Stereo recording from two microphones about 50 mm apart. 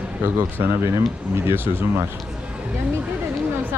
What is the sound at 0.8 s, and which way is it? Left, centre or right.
Speech, right.